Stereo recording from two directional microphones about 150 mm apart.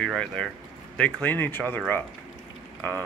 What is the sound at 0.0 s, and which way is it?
Speech, 5° left (ahead or behind).